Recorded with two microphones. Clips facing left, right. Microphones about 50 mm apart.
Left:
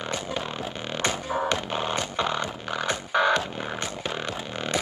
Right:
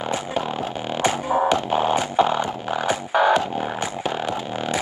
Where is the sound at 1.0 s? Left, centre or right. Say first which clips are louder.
Right 7 dB; centre.